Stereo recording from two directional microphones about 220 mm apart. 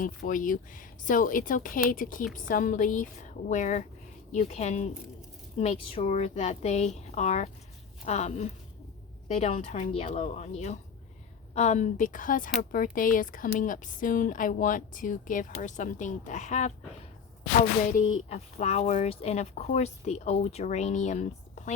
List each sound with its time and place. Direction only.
0.0 s speech: 40° left (ahead or behind)